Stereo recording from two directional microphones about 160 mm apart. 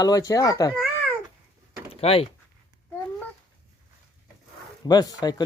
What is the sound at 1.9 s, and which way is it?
Typing, 35° left (ahead or behind).